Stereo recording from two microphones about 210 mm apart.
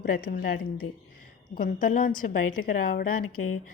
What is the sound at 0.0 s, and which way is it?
A woman's voice, 45° left (ahead or behind).